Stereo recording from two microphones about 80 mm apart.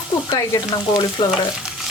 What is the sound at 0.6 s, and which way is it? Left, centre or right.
Speech, left.